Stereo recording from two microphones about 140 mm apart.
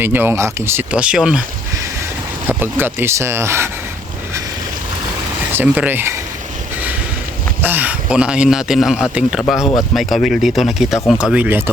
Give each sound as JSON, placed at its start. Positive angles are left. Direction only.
{"t": 0.0, "sound": "a man's voice", "side_deg": -15}
{"t": 2.5, "sound": "speech", "side_deg": -15}
{"t": 5.5, "sound": "speech", "side_deg": -15}
{"t": 7.6, "sound": "a man's voice", "side_deg": -15}
{"t": 9.6, "sound": "speech", "side_deg": 25}
{"t": 9.9, "sound": "a man's voice", "side_deg": 0}